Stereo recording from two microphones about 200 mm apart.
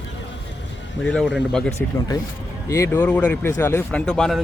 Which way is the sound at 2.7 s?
15° left (ahead or behind).